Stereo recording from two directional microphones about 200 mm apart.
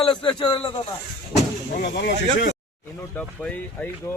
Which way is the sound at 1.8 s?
55° left (ahead or behind).